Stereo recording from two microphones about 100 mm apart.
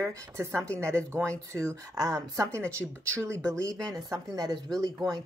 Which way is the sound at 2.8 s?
10° right (ahead or behind).